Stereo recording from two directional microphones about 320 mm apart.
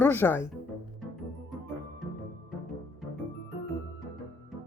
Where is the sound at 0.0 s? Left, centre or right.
Centre.